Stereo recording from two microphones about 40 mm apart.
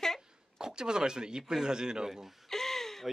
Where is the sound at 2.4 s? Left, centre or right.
Centre.